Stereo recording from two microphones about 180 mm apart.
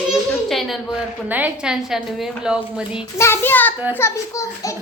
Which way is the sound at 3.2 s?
10° left (ahead or behind).